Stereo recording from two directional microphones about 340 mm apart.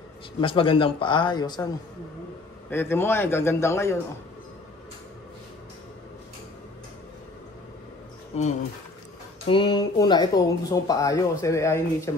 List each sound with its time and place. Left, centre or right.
0.4 s speech: centre
2.7 s speech: centre
8.3 s speech: centre